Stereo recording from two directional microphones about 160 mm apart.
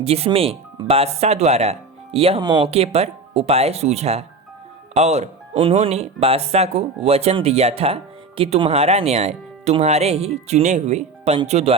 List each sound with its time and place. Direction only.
0.0 s speech: 40° right (ahead or behind)